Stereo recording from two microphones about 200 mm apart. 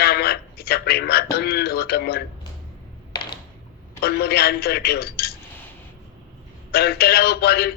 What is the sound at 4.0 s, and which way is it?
A man's voice, 50° left (ahead or behind).